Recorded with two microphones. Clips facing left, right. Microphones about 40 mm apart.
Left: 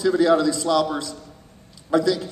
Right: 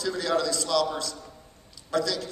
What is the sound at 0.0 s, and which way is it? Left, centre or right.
A man's voice, centre.